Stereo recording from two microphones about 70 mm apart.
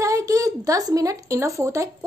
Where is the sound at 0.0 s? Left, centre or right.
Right.